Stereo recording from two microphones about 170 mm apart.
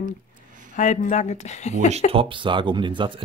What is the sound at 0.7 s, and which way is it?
A woman's voice, 45° left (ahead or behind).